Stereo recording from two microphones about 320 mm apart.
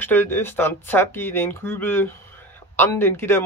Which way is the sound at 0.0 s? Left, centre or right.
Centre.